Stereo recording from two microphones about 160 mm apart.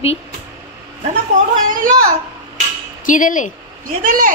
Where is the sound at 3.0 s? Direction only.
55° left (ahead or behind).